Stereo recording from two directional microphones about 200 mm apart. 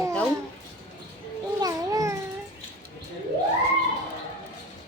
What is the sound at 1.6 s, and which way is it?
Babbling, 15° right (ahead or behind).